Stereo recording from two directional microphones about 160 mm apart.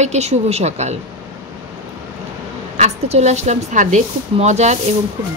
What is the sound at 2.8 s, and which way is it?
A woman's voice, 45° right (ahead or behind).